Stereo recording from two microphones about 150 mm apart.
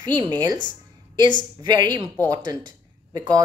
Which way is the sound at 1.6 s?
30° right (ahead or behind).